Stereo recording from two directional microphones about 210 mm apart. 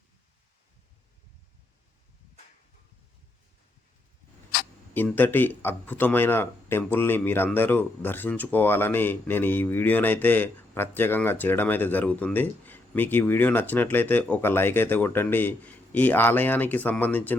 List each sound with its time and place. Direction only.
4.9 s speech: 10° left (ahead or behind)